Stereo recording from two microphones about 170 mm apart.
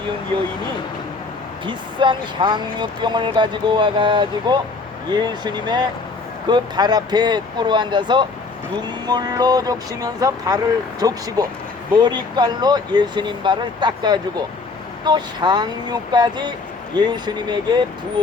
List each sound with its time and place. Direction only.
1.6 s speech: 30° right (ahead or behind)